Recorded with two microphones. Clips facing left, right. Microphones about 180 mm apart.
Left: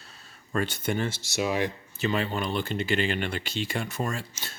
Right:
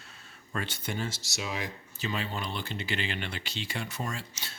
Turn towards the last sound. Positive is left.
turn(degrees=50)  # may be behind; listen again after turning